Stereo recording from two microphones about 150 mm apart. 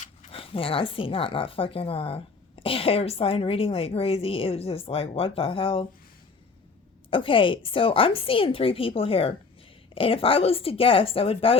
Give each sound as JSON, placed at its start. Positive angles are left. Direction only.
{"t": 0.3, "sound": "a woman's voice", "side_deg": 40}
{"t": 7.1, "sound": "a woman's voice", "side_deg": 35}